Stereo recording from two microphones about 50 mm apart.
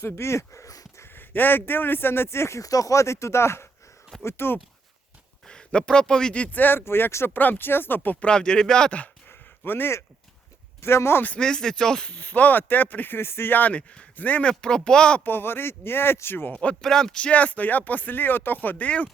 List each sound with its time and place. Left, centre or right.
0.0 s speech: left
1.1 s speech: left
5.5 s speech: centre
6.6 s speech: left
7.3 s speech: left
8.2 s speech: centre
9.3 s a sound: left
10.8 s speech: left
11.3 s speech: centre
12.1 s speech: left
13.1 s speech: left
14.8 s speech: centre
15.2 s speech: left
16.8 s speech: centre; by 18.9 s left